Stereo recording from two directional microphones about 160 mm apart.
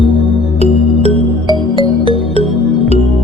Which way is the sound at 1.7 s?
30° left (ahead or behind).